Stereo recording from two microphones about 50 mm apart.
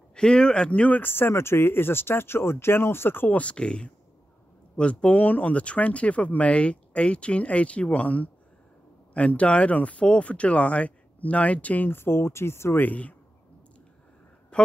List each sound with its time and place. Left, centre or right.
0.1 s speech: centre
1.0 s speech: left
3.3 s speech: left
11.9 s speech: left
12.7 s speech: left
14.5 s a woman's voice: left